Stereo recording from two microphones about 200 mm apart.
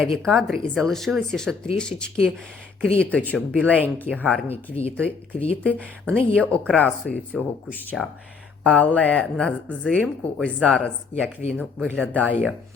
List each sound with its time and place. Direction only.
0.0 s speech: centre (ahead or behind)
3.7 s speech: 10° right (ahead or behind)
4.1 s speech: 5° left (ahead or behind)
4.4 s speech: 30° left (ahead or behind)
4.9 s speech: 5° left (ahead or behind)